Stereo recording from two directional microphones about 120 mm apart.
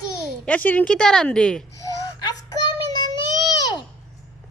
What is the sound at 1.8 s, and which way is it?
Child singing, 30° left (ahead or behind).